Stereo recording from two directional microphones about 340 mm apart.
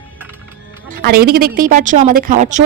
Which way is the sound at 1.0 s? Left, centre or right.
Right.